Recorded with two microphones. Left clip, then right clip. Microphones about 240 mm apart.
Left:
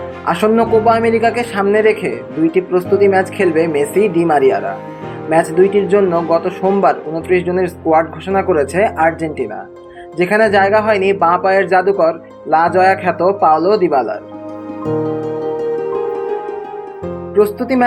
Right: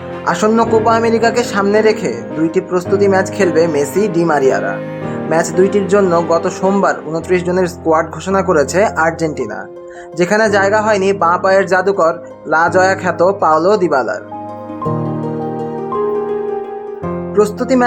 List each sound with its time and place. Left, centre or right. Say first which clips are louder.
0.3 s a man's voice: even; centre
5.9 s speech: right 1 dB; right
17.3 s speech: even; centre